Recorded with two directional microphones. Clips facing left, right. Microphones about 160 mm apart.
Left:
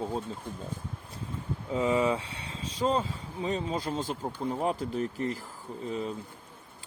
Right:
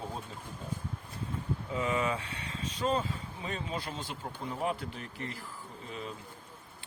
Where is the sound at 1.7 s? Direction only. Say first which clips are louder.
Left 6 dB; 30° left (ahead or behind).